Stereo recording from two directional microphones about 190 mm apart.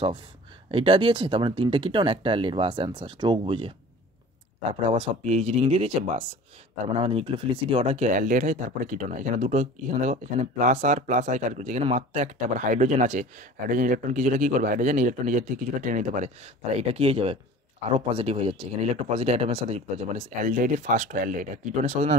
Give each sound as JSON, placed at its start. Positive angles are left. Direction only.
{"t": 0.7, "sound": "speech", "side_deg": -30}
{"t": 4.8, "sound": "speech", "side_deg": -30}